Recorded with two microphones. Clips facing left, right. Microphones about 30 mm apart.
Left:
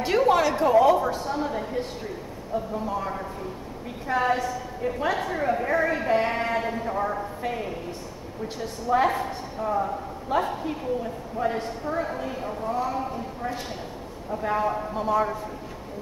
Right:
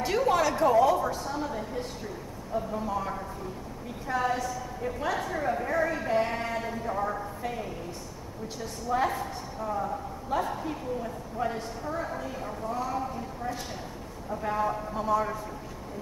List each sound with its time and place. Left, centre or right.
0.0 s speech: left
2.5 s speech: centre
4.1 s a woman's voice: left